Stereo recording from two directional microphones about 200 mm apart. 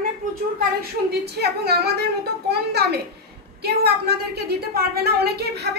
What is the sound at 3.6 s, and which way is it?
A woman's voice, 55° right (ahead or behind).